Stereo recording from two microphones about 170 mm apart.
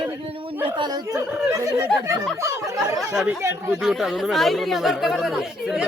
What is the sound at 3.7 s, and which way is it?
Speech, centre (ahead or behind).